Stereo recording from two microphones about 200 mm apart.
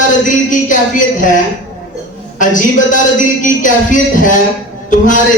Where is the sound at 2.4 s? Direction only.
40° left (ahead or behind).